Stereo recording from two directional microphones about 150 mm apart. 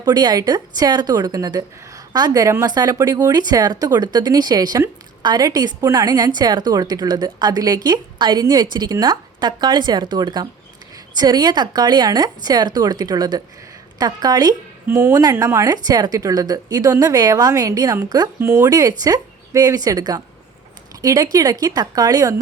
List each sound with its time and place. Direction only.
0.0 s a woman's voice: 30° right (ahead or behind)
14.8 s a woman's voice: 15° right (ahead or behind)